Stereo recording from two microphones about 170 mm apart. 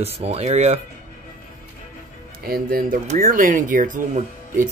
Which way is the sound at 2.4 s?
60° right (ahead or behind).